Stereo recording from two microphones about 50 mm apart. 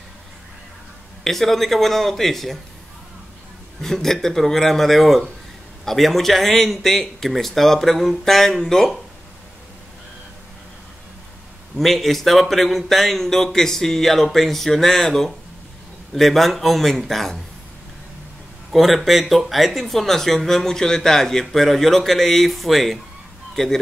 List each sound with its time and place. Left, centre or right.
1.2 s speech: centre
3.8 s speech: centre
11.7 s speech: centre
18.7 s speech: centre